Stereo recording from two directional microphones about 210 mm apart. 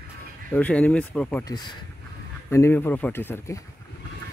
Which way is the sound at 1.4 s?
20° left (ahead or behind).